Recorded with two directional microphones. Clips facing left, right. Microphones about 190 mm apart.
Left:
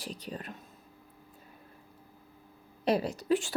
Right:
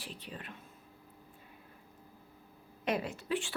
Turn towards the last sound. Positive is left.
turn(degrees=40)  # may be behind; listen again after turning